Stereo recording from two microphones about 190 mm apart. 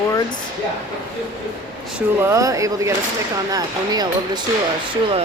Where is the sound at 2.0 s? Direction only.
15° right (ahead or behind).